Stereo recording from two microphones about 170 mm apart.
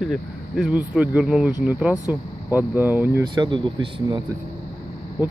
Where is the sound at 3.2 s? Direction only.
25° right (ahead or behind).